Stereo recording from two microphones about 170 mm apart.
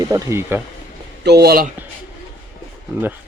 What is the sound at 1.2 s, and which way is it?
Speech, 75° right (ahead or behind).